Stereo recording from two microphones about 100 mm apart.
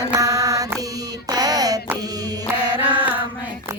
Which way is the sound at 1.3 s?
40° right (ahead or behind).